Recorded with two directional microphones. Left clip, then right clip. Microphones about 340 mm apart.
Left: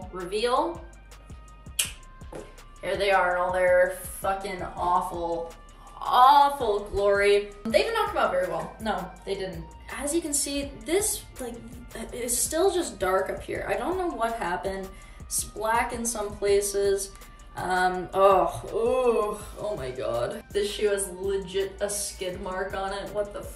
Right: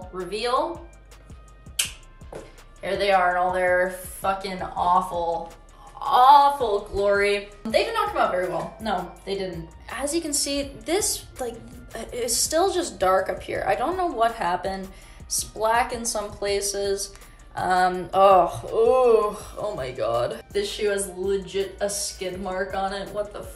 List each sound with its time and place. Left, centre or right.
0.0 s speech: centre
2.8 s speech: centre